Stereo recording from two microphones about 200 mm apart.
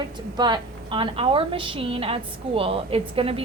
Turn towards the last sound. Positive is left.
turn(degrees=-30)  # may be behind; listen again after turning